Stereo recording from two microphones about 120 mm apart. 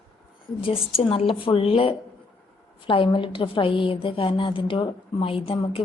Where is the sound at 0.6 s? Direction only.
50° left (ahead or behind).